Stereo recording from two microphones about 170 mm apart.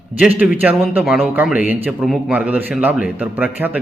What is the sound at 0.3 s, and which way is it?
A man's voice, 10° right (ahead or behind).